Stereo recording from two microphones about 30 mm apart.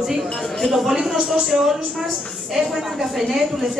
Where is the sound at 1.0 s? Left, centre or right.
Centre.